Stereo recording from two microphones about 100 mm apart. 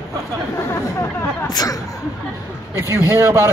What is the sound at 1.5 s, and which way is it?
Speech, 40° left (ahead or behind).